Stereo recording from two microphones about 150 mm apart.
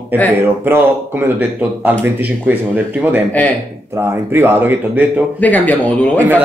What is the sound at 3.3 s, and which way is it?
Speech, 10° left (ahead or behind).